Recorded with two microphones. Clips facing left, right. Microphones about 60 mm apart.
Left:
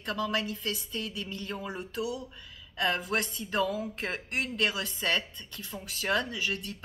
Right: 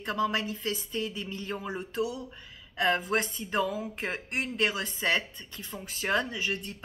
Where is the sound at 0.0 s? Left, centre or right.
Right.